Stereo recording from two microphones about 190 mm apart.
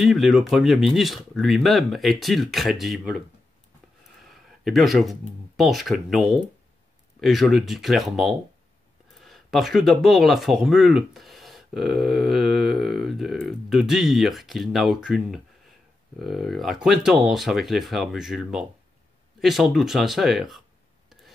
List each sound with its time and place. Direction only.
0.0 s speech: centre (ahead or behind)
4.2 s a sound: centre (ahead or behind)
5.6 s speech: centre (ahead or behind)